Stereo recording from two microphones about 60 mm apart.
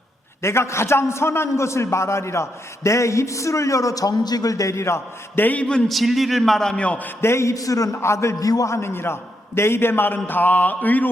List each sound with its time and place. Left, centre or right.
0.4 s a man's voice: left
5.4 s a man's voice: left
5.9 s a man's voice: centre
6.7 s a man's voice: left
7.2 s a man's voice: left
7.5 s a man's voice: left
7.9 s a man's voice: left
8.4 s a man's voice: left
8.7 s a man's voice: left